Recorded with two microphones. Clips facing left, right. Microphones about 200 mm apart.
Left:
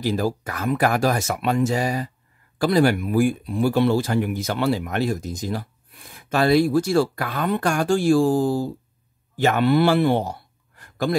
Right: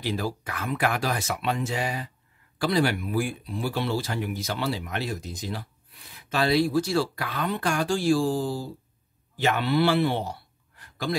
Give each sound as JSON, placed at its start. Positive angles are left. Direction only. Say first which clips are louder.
{"t": 0.0, "sound": "speech", "louder": "left 6 dB", "side_deg": 45}